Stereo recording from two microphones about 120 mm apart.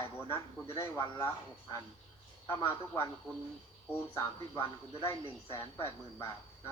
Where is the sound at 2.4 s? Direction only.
20° left (ahead or behind).